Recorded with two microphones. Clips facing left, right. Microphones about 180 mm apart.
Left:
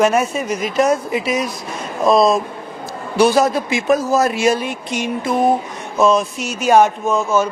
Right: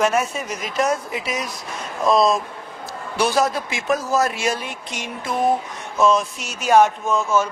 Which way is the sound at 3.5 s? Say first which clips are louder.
Left 6 dB; 10° left (ahead or behind).